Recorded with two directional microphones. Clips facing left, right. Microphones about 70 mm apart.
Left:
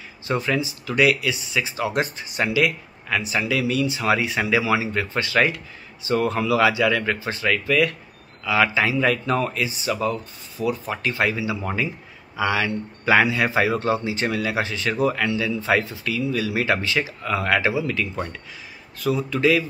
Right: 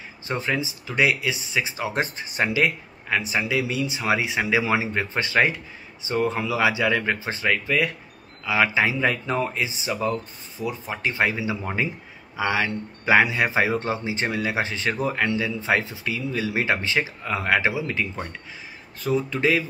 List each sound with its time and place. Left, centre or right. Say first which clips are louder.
0.3 s speech: left 3 dB; centre